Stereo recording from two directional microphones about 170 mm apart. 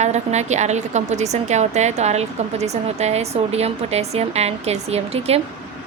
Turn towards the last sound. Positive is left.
turn(degrees=-35)  # may be behind; listen again after turning